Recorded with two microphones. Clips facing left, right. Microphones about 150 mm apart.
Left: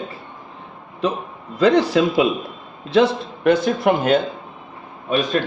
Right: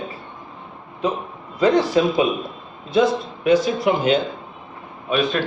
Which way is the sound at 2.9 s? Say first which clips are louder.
Left 1 dB; 65° left (ahead or behind).